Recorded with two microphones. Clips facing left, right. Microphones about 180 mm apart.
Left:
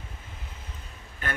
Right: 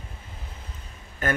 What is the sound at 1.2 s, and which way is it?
Speech, 40° right (ahead or behind).